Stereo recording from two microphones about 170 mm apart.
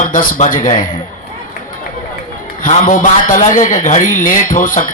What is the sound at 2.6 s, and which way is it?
A man's voice, 50° left (ahead or behind).